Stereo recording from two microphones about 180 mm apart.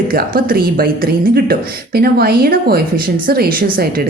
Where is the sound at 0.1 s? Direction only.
55° right (ahead or behind).